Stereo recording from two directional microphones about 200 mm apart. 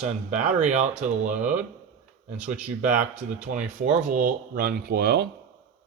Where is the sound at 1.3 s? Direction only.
5° right (ahead or behind).